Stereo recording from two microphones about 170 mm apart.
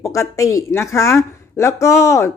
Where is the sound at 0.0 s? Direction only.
20° left (ahead or behind).